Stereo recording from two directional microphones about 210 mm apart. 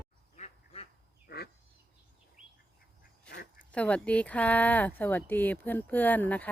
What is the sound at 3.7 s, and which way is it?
Speech, 5° left (ahead or behind).